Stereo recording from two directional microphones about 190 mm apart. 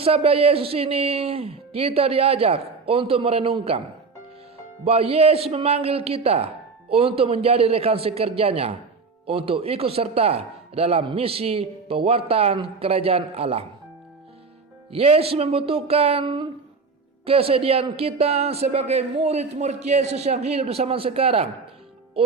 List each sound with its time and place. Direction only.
0.0 s a man's voice: 30° right (ahead or behind)
14.9 s a man's voice: 30° right (ahead or behind)